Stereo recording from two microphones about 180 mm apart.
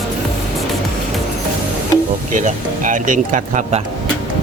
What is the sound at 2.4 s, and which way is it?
Speech, 45° right (ahead or behind).